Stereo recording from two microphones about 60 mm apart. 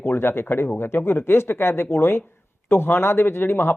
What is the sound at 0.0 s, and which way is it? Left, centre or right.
Speech, left.